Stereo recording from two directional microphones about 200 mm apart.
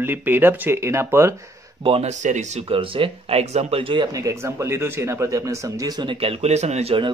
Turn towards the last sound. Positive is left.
turn(degrees=-30)  # may be behind; listen again after turning